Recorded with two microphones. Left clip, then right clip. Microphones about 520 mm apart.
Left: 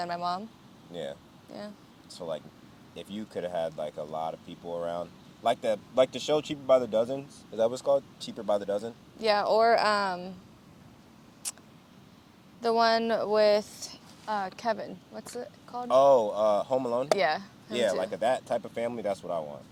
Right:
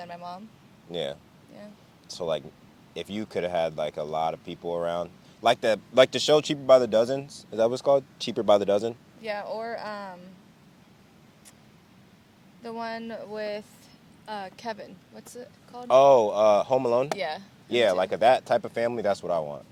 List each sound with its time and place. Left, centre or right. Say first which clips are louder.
0.0 s speech: left 7 dB; left
1.5 s speech: left 5 dB; left
2.0 s speech: right 7 dB; right
9.2 s speech: left 9 dB; left
12.6 s speech: left 10 dB; left
14.3 s speech: left 5 dB; centre
15.9 s speech: right 4 dB; right
17.2 s speech: left 5 dB; centre
17.7 s speech: right 5 dB; right